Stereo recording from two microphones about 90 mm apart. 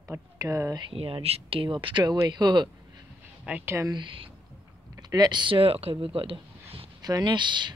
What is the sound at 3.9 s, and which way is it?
Speech, 70° right (ahead or behind).